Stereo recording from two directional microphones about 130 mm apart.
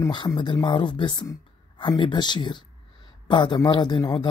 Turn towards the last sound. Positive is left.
turn(degrees=30)  # may be behind; listen again after turning